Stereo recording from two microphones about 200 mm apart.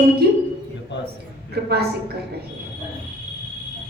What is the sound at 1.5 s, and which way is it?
Speech, 55° right (ahead or behind).